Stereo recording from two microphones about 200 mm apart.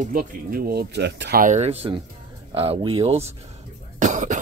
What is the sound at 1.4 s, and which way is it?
Speech, 35° right (ahead or behind).